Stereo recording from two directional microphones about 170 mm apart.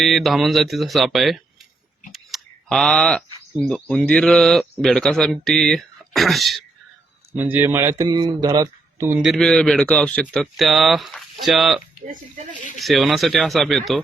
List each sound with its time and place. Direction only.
0.0 s speech: centre (ahead or behind)
2.1 s a sound: centre (ahead or behind)
3.7 s speech: 5° left (ahead or behind)
7.3 s speech: 10° right (ahead or behind)
9.2 s speech: centre (ahead or behind)
12.0 s speech: 50° right (ahead or behind)
12.8 s speech: centre (ahead or behind)